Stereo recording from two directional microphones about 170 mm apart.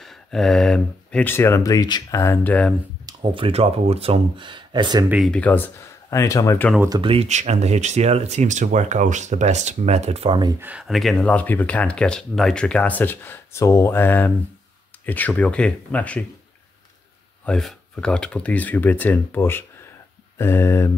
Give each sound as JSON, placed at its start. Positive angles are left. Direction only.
{"t": 0.0, "sound": "speech", "side_deg": 0}
{"t": 3.1, "sound": "speech", "side_deg": -30}
{"t": 5.3, "sound": "speech", "side_deg": 10}
{"t": 7.0, "sound": "speech", "side_deg": -35}
{"t": 10.6, "sound": "speech", "side_deg": -5}
{"t": 17.5, "sound": "speech", "side_deg": 5}